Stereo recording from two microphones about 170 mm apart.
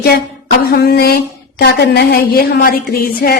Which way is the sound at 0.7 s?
65° left (ahead or behind).